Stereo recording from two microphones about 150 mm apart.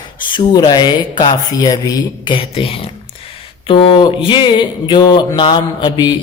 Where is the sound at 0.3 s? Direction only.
30° left (ahead or behind).